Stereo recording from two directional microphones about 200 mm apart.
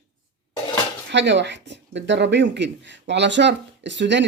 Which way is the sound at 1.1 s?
60° right (ahead or behind).